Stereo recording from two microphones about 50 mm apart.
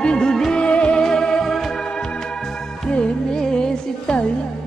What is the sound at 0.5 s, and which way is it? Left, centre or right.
Music, left.